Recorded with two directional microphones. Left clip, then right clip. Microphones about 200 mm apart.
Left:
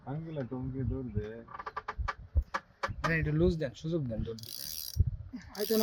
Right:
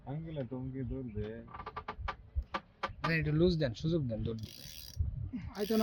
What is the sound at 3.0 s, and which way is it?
Speech, 15° right (ahead or behind).